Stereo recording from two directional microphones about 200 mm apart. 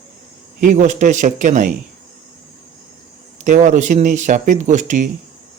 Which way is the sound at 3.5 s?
35° right (ahead or behind).